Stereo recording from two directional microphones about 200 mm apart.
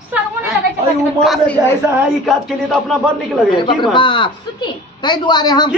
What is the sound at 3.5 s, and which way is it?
A woman's voice, 25° left (ahead or behind).